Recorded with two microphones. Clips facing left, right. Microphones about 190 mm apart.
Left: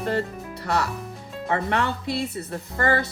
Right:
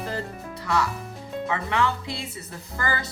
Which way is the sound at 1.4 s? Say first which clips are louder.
Left 2 dB; 55° left (ahead or behind).